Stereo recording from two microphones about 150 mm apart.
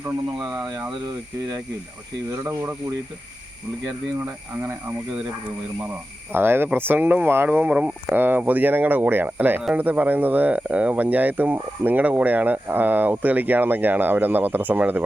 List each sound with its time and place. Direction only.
1.0 s speech: 20° right (ahead or behind)
6.3 s speech: 15° right (ahead or behind)